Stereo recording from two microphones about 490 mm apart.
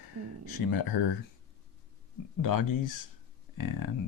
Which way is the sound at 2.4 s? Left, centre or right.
Left.